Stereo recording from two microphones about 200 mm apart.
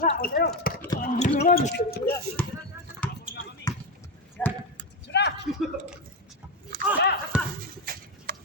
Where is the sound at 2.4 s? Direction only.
5° left (ahead or behind).